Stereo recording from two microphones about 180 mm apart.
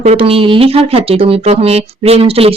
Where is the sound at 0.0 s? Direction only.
35° right (ahead or behind).